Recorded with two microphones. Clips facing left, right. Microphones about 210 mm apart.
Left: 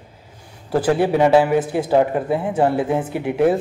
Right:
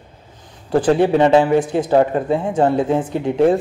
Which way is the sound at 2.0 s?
25° right (ahead or behind).